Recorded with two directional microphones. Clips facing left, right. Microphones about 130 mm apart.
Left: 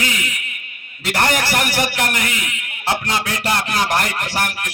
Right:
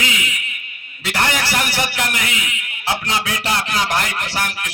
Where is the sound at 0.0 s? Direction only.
45° left (ahead or behind).